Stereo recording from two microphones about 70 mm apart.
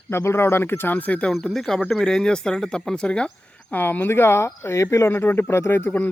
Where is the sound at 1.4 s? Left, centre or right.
Centre.